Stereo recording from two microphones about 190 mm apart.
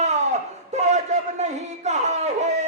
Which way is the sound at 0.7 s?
35° right (ahead or behind).